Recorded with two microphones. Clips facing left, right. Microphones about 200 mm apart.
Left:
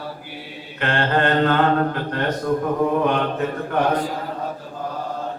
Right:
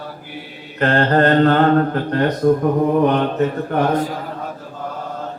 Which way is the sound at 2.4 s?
45° right (ahead or behind).